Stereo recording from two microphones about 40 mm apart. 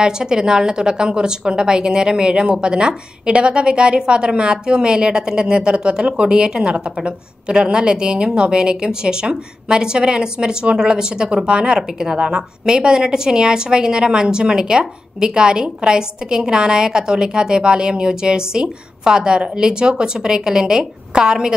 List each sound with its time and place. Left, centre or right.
0.0 s a woman's voice: centre